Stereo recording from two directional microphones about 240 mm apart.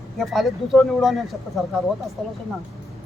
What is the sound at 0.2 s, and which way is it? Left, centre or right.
Speech, centre.